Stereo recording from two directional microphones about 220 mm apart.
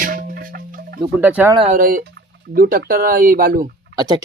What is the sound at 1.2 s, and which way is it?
Speech, 5° right (ahead or behind).